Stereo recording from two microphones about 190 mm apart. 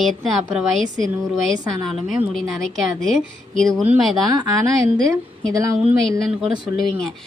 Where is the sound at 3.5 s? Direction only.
Centre (ahead or behind).